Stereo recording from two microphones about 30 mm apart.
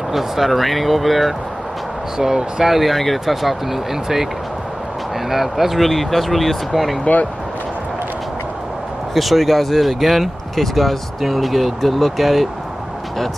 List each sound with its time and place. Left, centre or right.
0.1 s speech: centre
2.1 s speech: centre
2.6 s speech: centre
5.3 s speech: centre
5.8 s speech: centre
9.1 s speech: centre